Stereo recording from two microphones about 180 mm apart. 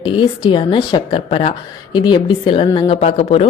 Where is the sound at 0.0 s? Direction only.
25° left (ahead or behind).